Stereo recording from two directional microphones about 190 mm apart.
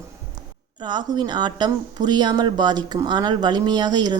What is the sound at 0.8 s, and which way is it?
A woman's voice, 25° right (ahead or behind).